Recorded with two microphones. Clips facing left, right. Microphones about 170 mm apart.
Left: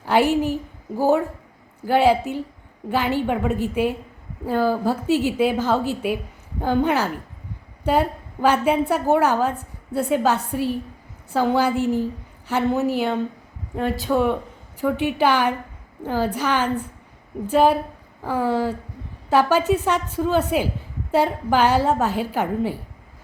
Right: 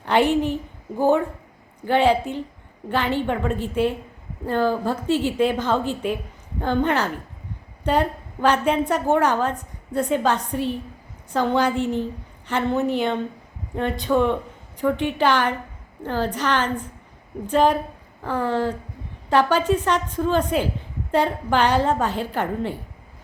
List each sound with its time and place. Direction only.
0.0 s a woman's voice: 5° left (ahead or behind)